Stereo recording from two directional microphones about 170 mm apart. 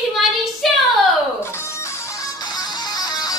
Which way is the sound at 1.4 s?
15° left (ahead or behind).